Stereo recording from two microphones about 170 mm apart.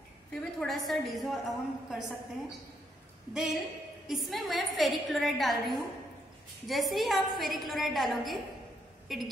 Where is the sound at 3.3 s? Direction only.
Centre (ahead or behind).